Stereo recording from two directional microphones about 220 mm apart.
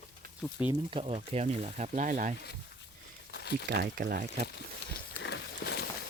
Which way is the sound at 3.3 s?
50° left (ahead or behind).